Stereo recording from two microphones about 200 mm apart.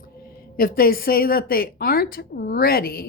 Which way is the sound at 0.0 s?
50° left (ahead or behind).